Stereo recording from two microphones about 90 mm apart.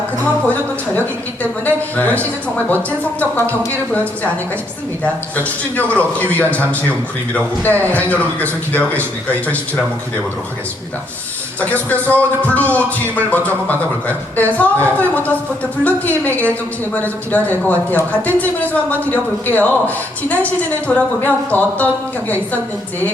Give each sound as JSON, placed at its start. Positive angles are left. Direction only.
{"t": 0.4, "sound": "a man's voice", "side_deg": 20}
{"t": 3.7, "sound": "a man's voice", "side_deg": 15}
{"t": 11.6, "sound": "a man's voice", "side_deg": 15}